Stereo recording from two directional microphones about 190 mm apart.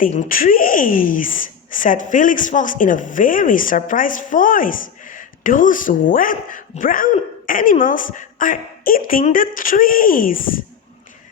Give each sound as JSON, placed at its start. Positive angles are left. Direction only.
{"t": 0.0, "sound": "speech", "side_deg": 45}